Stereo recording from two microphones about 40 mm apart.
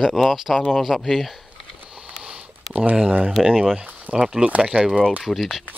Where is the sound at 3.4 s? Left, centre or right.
Right.